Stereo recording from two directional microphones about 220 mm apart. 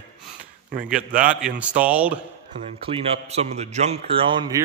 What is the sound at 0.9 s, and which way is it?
Speech, 40° right (ahead or behind).